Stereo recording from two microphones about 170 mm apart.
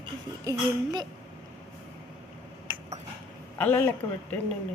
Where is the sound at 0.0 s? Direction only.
25° right (ahead or behind).